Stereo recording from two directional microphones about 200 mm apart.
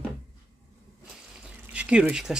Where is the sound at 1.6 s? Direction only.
5° right (ahead or behind).